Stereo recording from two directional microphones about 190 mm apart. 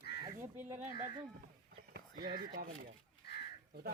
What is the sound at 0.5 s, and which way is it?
Speech, 10° right (ahead or behind).